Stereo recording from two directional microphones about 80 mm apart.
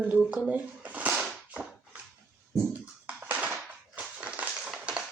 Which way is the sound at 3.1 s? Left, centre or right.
Right.